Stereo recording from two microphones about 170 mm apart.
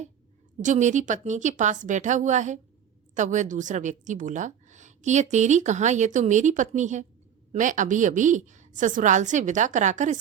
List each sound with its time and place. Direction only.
0.6 s a woman's voice: 45° right (ahead or behind)